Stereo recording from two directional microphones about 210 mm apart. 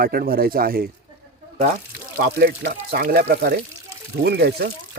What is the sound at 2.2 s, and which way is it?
A man's voice, 45° right (ahead or behind).